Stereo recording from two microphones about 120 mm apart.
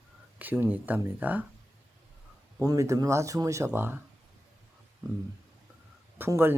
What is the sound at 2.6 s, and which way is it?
Speech, 30° right (ahead or behind).